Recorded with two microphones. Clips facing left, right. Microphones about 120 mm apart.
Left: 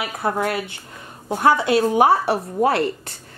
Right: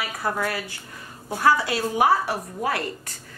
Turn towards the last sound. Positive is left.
turn(degrees=30)  # may be behind; listen again after turning